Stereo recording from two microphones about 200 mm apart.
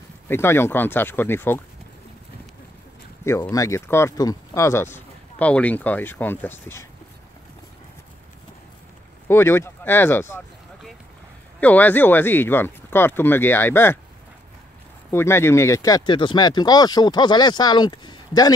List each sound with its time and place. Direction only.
0.3 s speech: 10° left (ahead or behind)
3.3 s speech: 15° left (ahead or behind)
9.3 s speech: 15° left (ahead or behind)
11.6 s speech: 10° left (ahead or behind)
15.0 s speech: 10° left (ahead or behind)